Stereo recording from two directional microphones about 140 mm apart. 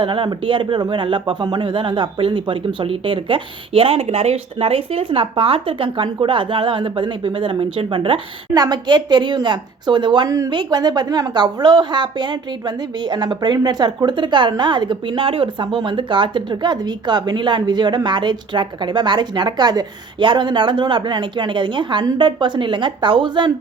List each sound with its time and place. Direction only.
0.0 s a woman's voice: 35° right (ahead or behind)